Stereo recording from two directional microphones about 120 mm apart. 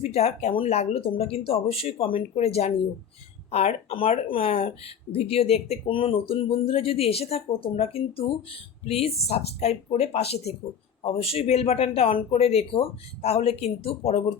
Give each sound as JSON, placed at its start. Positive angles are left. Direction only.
{"t": 0.0, "sound": "speech", "side_deg": 65}